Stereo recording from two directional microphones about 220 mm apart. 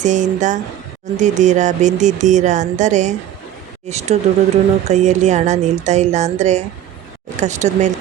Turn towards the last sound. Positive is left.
turn(degrees=-30)  # may be behind; listen again after turning